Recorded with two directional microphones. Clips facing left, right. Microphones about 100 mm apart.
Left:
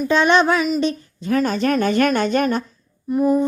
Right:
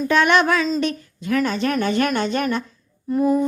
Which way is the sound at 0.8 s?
25° left (ahead or behind).